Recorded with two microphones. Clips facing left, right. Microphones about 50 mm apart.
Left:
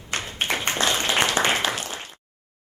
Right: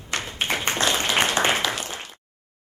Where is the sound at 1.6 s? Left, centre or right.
Left.